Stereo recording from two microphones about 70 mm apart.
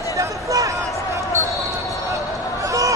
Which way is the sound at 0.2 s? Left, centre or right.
Right.